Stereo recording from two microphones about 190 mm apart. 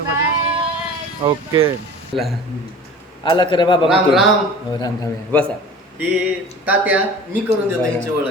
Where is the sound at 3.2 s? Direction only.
25° left (ahead or behind).